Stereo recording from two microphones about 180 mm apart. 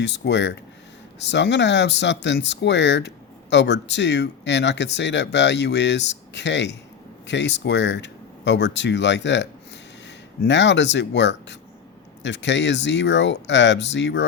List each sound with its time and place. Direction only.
0.0 s speech: 75° left (ahead or behind)